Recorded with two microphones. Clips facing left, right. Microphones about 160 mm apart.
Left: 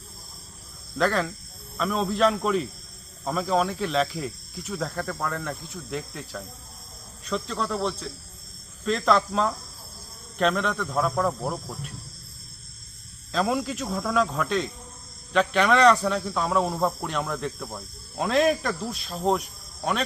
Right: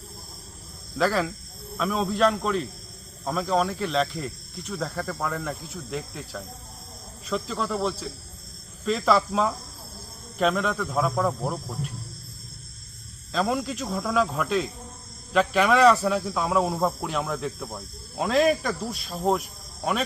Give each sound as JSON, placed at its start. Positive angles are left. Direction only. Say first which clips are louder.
{"t": 0.9, "sound": "speech", "louder": "even", "side_deg": -5}
{"t": 13.3, "sound": "speech", "louder": "even", "side_deg": 0}